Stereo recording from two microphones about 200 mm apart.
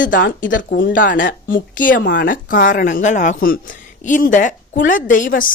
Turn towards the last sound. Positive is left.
turn(degrees=45)  # may be behind; listen again after turning